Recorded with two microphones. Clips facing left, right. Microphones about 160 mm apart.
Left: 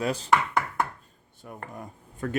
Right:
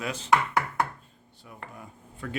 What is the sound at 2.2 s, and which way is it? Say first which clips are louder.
Speech: left 5 dB; 45° left (ahead or behind).